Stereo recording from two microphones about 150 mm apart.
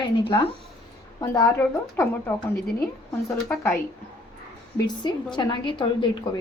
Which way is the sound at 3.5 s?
10° left (ahead or behind).